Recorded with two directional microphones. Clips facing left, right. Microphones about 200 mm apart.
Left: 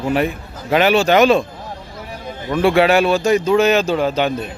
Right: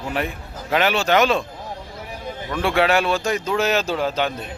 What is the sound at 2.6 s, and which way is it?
Speech, 10° left (ahead or behind).